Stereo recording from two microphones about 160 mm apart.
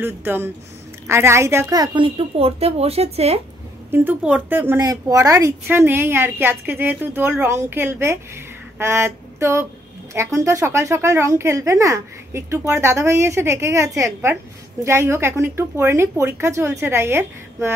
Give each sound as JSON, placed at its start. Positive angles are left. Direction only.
{"t": 0.0, "sound": "a woman's voice", "side_deg": -15}
{"t": 3.9, "sound": "a woman's voice", "side_deg": -10}
{"t": 8.7, "sound": "a sound", "side_deg": -15}
{"t": 10.1, "sound": "a woman's voice", "side_deg": -15}